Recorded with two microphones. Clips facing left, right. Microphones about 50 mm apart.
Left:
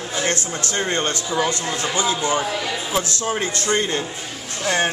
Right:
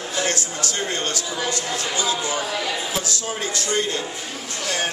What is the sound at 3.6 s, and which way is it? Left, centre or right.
Speech, left.